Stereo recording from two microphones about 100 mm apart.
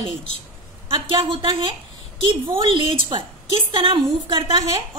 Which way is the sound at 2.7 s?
60° right (ahead or behind).